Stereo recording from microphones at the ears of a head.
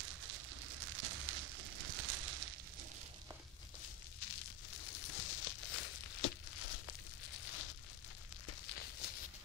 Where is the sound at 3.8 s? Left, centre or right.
Left.